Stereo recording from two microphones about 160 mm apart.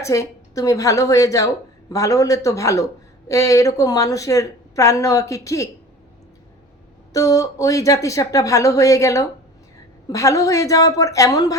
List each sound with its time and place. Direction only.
0.0 s a woman's voice: 20° left (ahead or behind)
7.1 s a woman's voice: 20° left (ahead or behind)